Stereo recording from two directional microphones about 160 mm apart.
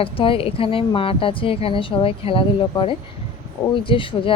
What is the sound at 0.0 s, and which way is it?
Speech, 35° left (ahead or behind).